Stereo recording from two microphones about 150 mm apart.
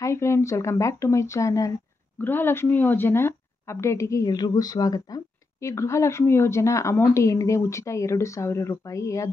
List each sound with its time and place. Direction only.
0.0 s a woman's voice: 20° left (ahead or behind)